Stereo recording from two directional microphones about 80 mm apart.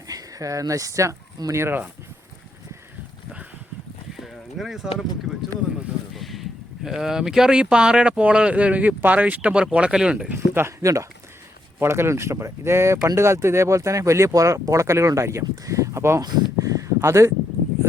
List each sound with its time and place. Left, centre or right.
0.1 s speech: right
1.6 s speech: right
4.2 s speech: centre
6.1 s speech: centre
10.3 s speech: right
10.8 s speech: right
16.6 s a sound: right